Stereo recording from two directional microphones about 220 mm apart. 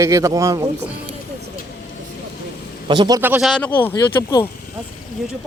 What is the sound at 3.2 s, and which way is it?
Speech, 10° right (ahead or behind).